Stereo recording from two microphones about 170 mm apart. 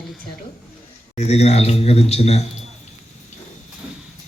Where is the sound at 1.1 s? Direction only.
40° left (ahead or behind).